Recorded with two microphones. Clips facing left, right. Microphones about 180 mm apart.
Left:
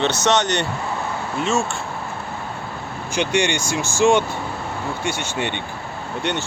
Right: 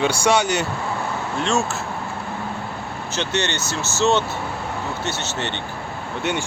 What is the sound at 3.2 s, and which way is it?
Speech, 10° left (ahead or behind).